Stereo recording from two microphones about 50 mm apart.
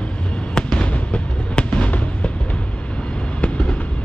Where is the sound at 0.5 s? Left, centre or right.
Centre.